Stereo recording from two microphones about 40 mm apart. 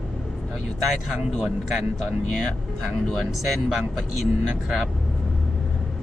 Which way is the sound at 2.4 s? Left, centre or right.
Centre.